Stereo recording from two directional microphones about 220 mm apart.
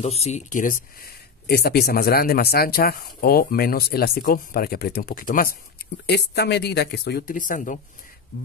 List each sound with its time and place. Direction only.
0.0 s speech: 30° left (ahead or behind)